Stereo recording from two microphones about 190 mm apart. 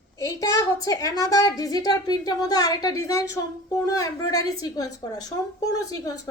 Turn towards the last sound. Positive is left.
turn(degrees=20)  # may be behind; listen again after turning